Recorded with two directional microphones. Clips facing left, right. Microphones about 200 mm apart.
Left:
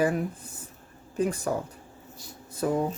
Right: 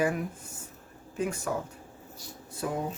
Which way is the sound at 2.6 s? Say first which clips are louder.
Left 6 dB; 40° left (ahead or behind).